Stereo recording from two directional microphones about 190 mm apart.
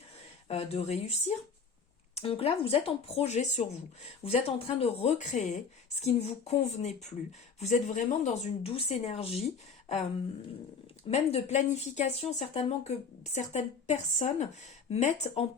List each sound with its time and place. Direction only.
0.4 s speech: 30° left (ahead or behind)
2.1 s speech: 30° left (ahead or behind)
11.1 s speech: 35° left (ahead or behind)